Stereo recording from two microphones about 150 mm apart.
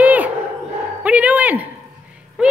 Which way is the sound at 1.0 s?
10° right (ahead or behind).